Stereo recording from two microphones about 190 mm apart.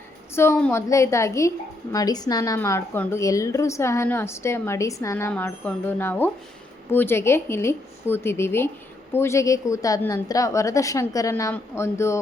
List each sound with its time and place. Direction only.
0.3 s a woman's voice: 15° left (ahead or behind)